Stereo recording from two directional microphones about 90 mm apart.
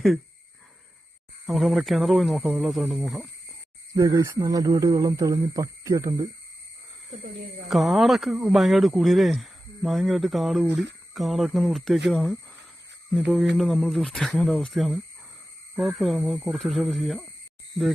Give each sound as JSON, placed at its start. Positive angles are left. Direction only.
{"t": 1.5, "sound": "speech", "side_deg": 0}
{"t": 3.9, "sound": "speech", "side_deg": -40}
{"t": 7.7, "sound": "speech", "side_deg": 0}